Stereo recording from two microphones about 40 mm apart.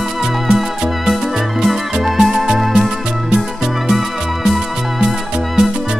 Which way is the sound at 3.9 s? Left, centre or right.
Centre.